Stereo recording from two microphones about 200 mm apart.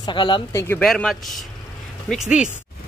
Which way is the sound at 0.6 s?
10° left (ahead or behind).